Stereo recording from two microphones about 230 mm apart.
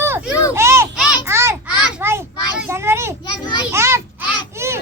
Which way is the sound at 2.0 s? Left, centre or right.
Centre.